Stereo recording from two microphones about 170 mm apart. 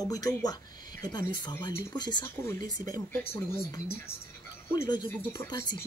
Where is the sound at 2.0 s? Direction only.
25° left (ahead or behind).